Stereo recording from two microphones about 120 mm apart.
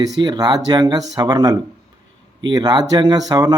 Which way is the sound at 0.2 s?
35° right (ahead or behind).